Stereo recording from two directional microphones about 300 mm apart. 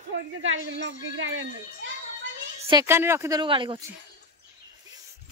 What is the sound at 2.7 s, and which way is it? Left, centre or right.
Speech, centre.